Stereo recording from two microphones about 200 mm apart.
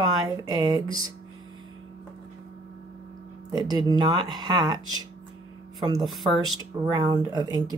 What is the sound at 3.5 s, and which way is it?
Speech, 20° right (ahead or behind).